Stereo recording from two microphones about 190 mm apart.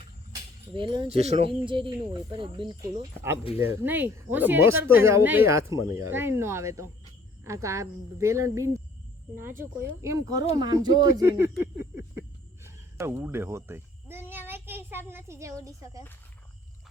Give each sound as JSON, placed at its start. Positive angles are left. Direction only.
{"t": 0.7, "sound": "speech", "side_deg": -25}
{"t": 3.8, "sound": "speech", "side_deg": -10}
{"t": 14.3, "sound": "child singing", "side_deg": -10}